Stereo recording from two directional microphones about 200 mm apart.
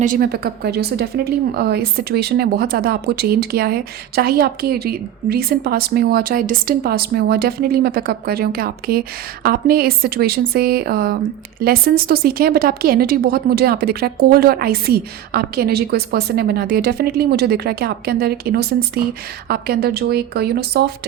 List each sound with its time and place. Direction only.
0.0 s a woman's voice: 45° right (ahead or behind)